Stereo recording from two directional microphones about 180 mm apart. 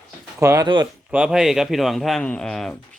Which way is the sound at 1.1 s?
5° right (ahead or behind).